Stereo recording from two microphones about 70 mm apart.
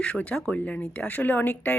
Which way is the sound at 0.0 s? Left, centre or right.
Centre.